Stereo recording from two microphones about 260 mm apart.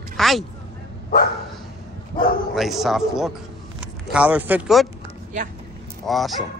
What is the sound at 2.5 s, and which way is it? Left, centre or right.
A man's voice, centre.